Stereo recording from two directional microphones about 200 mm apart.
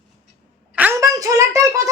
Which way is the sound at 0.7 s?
10° right (ahead or behind).